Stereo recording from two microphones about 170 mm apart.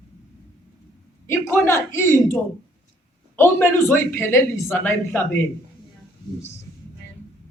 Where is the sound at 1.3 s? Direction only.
15° left (ahead or behind).